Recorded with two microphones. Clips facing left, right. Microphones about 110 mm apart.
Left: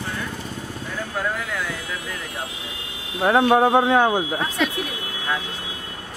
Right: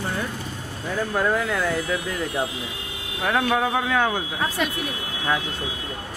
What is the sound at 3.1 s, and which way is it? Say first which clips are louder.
Speech: left 6 dB; 30° left (ahead or behind).